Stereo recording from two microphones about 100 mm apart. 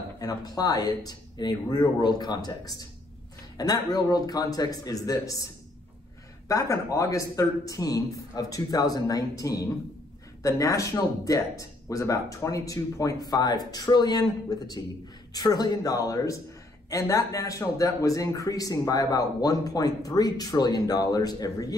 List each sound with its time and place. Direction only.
0.2 s a man's voice: 40° left (ahead or behind)